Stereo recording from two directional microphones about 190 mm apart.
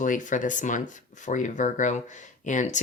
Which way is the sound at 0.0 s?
45° left (ahead or behind).